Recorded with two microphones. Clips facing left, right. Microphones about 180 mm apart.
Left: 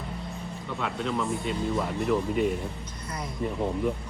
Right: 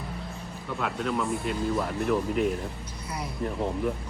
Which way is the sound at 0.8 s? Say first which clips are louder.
Right 1 dB; centre (ahead or behind).